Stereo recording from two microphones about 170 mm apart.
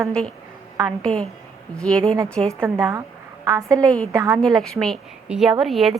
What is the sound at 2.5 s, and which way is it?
A woman's voice, 15° right (ahead or behind).